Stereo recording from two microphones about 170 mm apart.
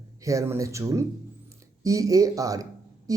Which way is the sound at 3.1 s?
20° right (ahead or behind).